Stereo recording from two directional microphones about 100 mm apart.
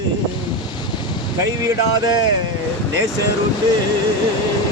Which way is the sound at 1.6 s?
35° right (ahead or behind).